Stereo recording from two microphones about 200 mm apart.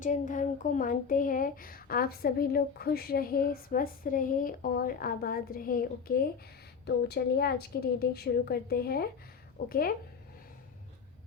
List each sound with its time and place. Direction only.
0.0 s speech: 40° left (ahead or behind)